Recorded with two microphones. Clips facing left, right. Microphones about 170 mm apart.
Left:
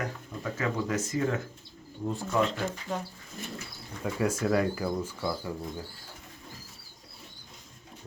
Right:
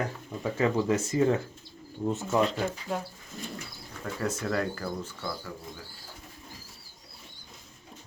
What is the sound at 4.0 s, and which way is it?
Speech, 10° left (ahead or behind).